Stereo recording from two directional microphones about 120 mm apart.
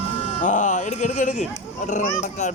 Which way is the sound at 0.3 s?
90° left.